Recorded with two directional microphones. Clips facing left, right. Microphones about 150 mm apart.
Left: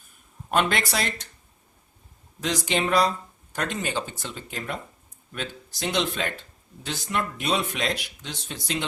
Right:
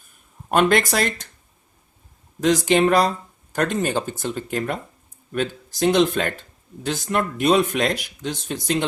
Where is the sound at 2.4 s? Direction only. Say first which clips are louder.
Right 9 dB; 50° right (ahead or behind).